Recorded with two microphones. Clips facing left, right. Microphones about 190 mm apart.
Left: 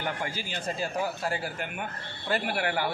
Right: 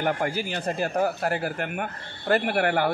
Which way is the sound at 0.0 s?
55° right (ahead or behind).